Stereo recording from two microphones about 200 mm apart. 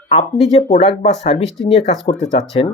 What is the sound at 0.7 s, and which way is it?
Speech, 30° left (ahead or behind).